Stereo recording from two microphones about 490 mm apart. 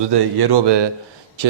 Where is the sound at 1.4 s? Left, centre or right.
Right.